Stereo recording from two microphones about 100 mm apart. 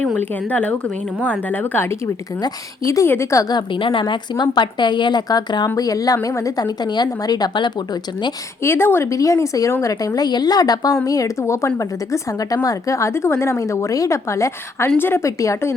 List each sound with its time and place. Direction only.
0.2 s a woman's voice: 15° left (ahead or behind)
3.5 s a woman's voice: 60° left (ahead or behind)
8.6 s a woman's voice: 25° left (ahead or behind)